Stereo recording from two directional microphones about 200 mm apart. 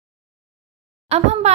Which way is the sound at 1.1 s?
35° right (ahead or behind).